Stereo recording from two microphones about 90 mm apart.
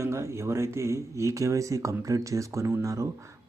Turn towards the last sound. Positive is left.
turn(degrees=-35)  # may be behind; listen again after turning